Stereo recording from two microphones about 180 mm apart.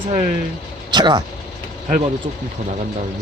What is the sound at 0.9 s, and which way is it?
Vehicle, 25° right (ahead or behind).